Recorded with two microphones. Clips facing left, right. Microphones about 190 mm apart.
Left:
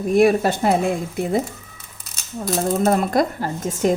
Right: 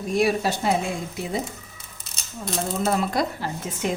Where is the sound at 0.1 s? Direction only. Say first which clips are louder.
Left 6 dB; 55° left (ahead or behind).